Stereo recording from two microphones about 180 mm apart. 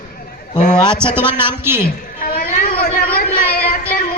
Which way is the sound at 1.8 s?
55° left (ahead or behind).